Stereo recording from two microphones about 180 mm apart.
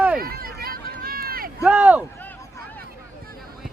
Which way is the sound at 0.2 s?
55° right (ahead or behind).